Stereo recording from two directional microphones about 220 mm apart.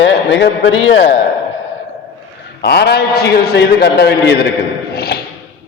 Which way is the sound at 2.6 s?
50° left (ahead or behind).